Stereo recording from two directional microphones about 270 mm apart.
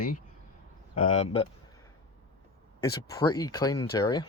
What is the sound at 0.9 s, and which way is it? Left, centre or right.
Speech, left.